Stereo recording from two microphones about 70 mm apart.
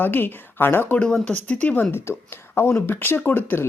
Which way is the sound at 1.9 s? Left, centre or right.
Left.